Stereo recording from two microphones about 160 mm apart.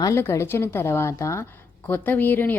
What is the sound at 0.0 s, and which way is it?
A woman's voice, 15° left (ahead or behind).